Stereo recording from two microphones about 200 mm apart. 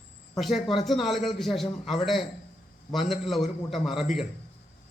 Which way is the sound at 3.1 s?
Centre (ahead or behind).